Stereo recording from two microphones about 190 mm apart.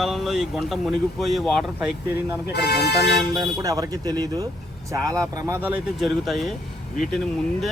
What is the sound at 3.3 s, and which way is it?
Speech, 20° right (ahead or behind).